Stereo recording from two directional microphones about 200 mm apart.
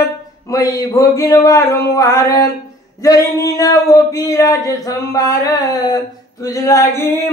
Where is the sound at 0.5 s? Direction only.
15° left (ahead or behind).